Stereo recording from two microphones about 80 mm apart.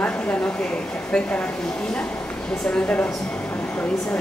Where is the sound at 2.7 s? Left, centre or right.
Centre.